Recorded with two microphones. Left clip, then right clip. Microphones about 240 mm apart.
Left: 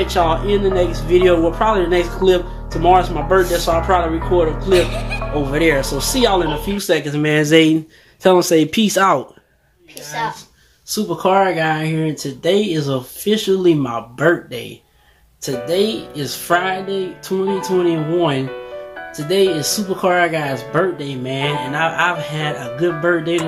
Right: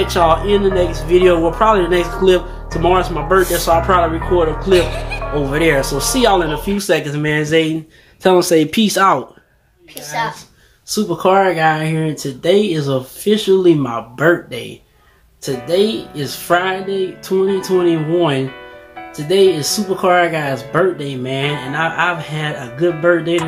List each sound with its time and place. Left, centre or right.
0.0 s speech: centre
7.3 s speech: left
8.2 s speech: centre
10.9 s speech: centre